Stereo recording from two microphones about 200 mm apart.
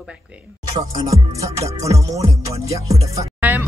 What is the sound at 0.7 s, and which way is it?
A woman's voice, 20° right (ahead or behind).